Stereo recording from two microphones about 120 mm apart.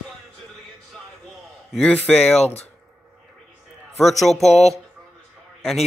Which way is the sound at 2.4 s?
65° left (ahead or behind).